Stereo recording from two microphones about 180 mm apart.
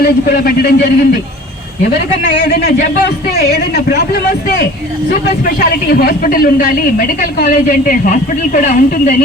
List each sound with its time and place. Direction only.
0.0 s a man's voice: 60° left (ahead or behind)
2.4 s a man's voice: 50° left (ahead or behind)